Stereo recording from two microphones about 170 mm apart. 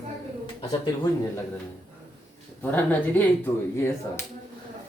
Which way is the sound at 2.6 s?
10° left (ahead or behind).